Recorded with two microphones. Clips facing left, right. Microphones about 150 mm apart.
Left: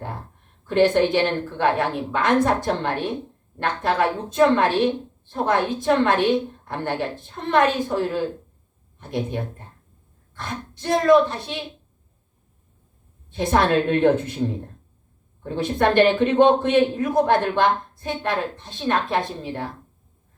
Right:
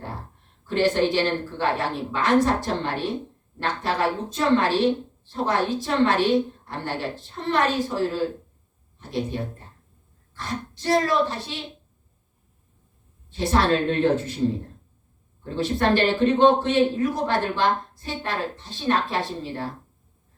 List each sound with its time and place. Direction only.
0.7 s a man's voice: 55° left (ahead or behind)
13.3 s a man's voice: 55° left (ahead or behind)
15.4 s a man's voice: 55° left (ahead or behind)